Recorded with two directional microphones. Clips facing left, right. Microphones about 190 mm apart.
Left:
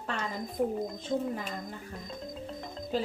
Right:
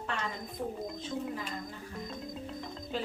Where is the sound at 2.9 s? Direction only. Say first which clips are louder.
Left 5 dB; 40° left (ahead or behind).